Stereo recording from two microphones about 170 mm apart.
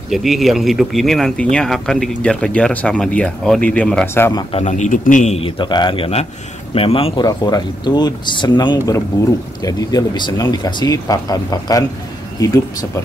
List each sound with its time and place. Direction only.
0.1 s speech: centre (ahead or behind)
4.3 s speech: 30° left (ahead or behind)
4.6 s a man's voice: 45° left (ahead or behind)
5.6 s speech: 25° left (ahead or behind)
7.2 s speech: 25° left (ahead or behind)